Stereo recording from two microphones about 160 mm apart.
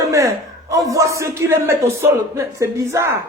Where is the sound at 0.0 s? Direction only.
20° right (ahead or behind).